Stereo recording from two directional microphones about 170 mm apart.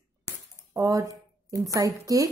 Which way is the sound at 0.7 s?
20° right (ahead or behind).